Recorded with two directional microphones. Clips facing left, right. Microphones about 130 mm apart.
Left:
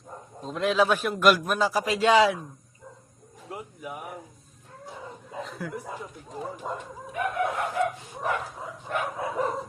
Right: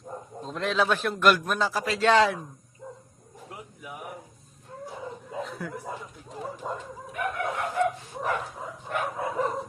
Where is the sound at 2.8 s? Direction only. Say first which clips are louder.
Right 6 dB; 30° right (ahead or behind).